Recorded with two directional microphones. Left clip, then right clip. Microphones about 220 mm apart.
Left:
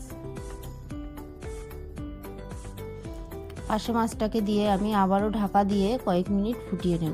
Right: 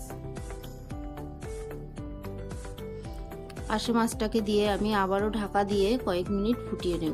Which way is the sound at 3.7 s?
35° left (ahead or behind).